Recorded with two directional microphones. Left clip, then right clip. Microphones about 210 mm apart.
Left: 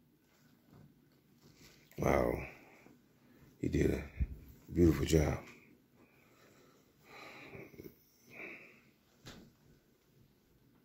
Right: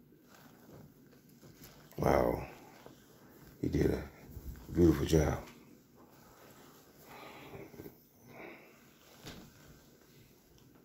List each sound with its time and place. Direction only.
2.0 s speech: 30° left (ahead or behind)
3.7 s speech: 30° left (ahead or behind)
7.2 s a sound: 25° left (ahead or behind)